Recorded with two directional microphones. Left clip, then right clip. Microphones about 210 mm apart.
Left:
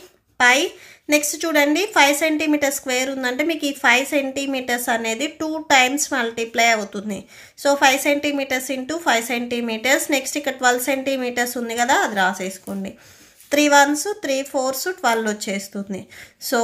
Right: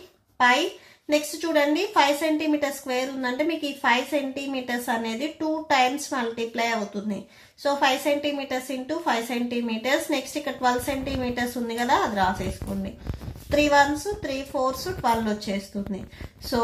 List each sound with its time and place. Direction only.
0.4 s a woman's voice: 40° left (ahead or behind)
13.5 s a woman's voice: 40° left (ahead or behind)